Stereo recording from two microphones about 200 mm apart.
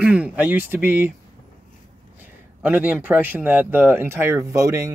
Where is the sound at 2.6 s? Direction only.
5° right (ahead or behind).